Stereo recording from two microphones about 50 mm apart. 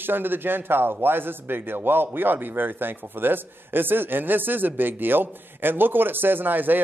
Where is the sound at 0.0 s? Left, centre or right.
Right.